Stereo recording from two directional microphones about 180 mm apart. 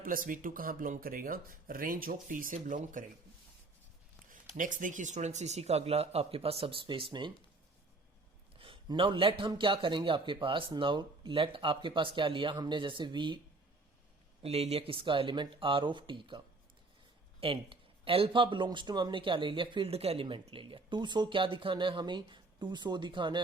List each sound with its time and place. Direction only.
0.0 s speech: 50° right (ahead or behind)
4.5 s speech: 45° right (ahead or behind); by 7.3 s 25° right (ahead or behind)
8.5 s a sound: 30° right (ahead or behind)
9.4 s speech: 25° right (ahead or behind)
14.4 s speech: 35° right (ahead or behind)
17.4 s speech: 30° right (ahead or behind)